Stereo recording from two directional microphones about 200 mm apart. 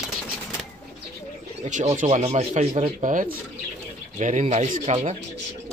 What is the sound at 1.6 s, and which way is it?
Speech, 40° right (ahead or behind).